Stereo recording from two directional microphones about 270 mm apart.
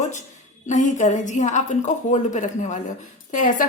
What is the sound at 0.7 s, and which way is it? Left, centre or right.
A woman's voice, left.